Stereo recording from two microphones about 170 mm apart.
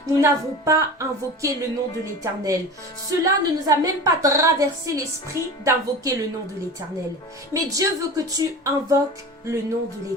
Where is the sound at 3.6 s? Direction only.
20° right (ahead or behind).